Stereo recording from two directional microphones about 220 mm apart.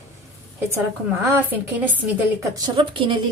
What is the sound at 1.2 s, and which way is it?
Speech, 10° right (ahead or behind).